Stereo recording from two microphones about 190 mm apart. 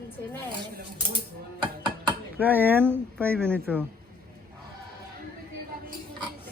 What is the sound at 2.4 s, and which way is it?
Speech, 10° right (ahead or behind).